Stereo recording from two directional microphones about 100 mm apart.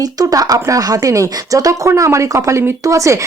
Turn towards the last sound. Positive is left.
turn(degrees=-30)  # may be behind; listen again after turning